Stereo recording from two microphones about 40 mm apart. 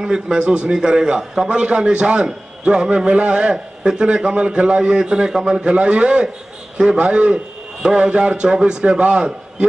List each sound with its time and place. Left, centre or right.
0.0 s a man's voice: centre